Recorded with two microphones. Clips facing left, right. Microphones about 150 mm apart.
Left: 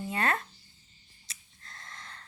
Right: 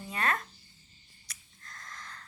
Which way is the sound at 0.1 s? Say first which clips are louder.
Left 1 dB; 30° left (ahead or behind).